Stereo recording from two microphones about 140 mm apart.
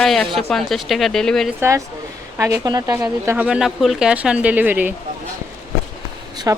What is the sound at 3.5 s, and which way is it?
Speech, 5° right (ahead or behind).